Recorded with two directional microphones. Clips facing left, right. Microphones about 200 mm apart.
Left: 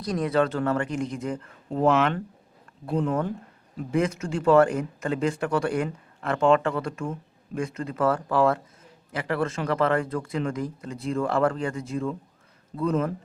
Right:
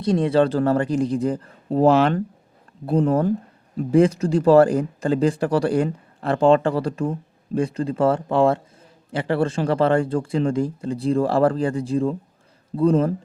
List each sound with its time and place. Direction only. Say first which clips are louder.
0.0 s speech: right 6 dB; 25° right (ahead or behind)